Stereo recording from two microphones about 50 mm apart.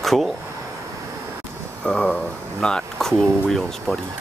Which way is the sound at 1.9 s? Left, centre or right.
Left.